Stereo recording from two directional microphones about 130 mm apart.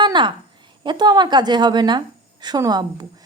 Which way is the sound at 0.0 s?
35° right (ahead or behind).